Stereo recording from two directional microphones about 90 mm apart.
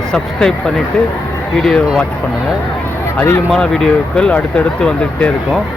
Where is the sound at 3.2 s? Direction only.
25° left (ahead or behind).